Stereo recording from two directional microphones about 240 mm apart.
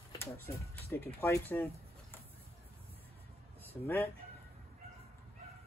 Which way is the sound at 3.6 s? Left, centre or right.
Centre.